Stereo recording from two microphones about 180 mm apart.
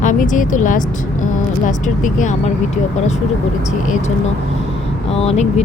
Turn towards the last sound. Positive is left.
turn(degrees=35)  # may be behind; listen again after turning